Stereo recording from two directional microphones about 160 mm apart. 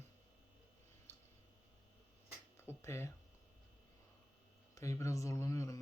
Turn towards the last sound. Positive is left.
turn(degrees=20)  # may be behind; listen again after turning